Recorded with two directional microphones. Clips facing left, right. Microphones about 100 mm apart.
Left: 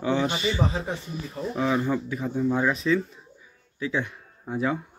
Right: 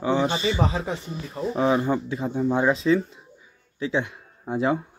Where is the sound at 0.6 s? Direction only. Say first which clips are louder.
Right 2 dB; 90° right.